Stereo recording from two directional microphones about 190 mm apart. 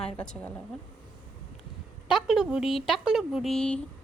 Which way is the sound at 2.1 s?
5° right (ahead or behind).